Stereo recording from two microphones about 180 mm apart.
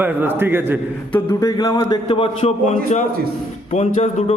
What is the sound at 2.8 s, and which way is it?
Speech, 40° left (ahead or behind).